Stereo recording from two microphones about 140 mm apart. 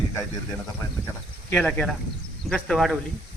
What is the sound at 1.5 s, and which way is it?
Speech, 10° left (ahead or behind).